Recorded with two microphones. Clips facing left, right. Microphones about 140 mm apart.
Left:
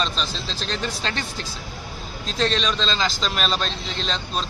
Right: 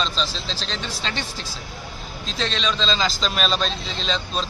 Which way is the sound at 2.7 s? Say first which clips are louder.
Right 1 dB; centre (ahead or behind).